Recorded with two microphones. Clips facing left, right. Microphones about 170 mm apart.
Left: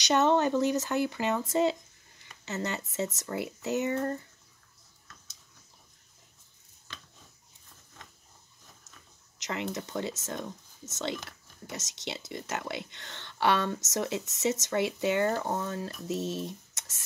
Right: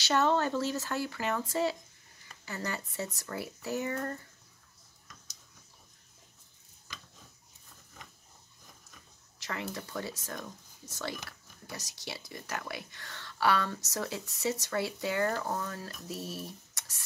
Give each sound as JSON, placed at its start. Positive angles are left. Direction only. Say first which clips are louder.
{"t": 0.0, "sound": "speech", "louder": "left 3 dB", "side_deg": 20}
{"t": 9.4, "sound": "speech", "louder": "left 4 dB", "side_deg": 20}